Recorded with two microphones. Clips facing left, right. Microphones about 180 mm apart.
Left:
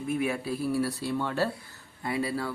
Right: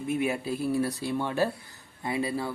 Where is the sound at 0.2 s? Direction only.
25° right (ahead or behind).